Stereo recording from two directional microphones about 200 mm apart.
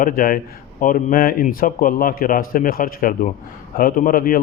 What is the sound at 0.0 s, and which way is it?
A man's voice, 45° left (ahead or behind).